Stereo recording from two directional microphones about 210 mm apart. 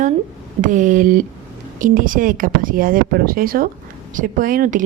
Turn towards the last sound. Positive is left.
turn(degrees=-40)  # may be behind; listen again after turning